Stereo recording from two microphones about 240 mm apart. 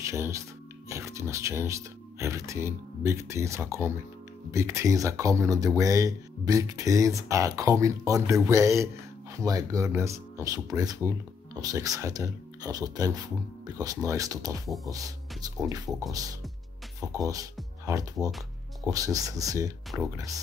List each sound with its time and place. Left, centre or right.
0.0 s speech: centre
17.2 s speech: centre
18.2 s speech: centre
18.9 s speech: centre